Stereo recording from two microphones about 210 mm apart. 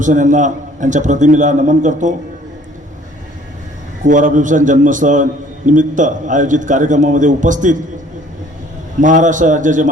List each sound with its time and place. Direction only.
0.0 s a man's voice: 35° right (ahead or behind)
4.0 s a man's voice: 40° right (ahead or behind)
9.0 s a man's voice: 35° right (ahead or behind)